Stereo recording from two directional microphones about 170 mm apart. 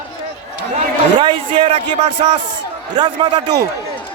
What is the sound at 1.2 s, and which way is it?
Speech, 30° right (ahead or behind).